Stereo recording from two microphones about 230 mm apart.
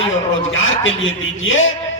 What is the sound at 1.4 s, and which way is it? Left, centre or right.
Speech, left.